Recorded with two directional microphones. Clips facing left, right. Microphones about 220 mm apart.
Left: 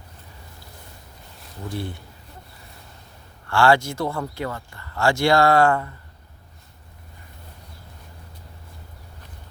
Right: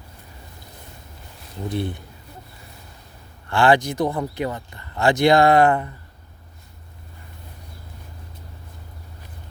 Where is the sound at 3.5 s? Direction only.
20° right (ahead or behind).